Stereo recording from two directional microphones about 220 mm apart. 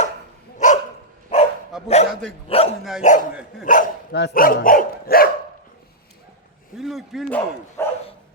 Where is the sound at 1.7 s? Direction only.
Centre (ahead or behind).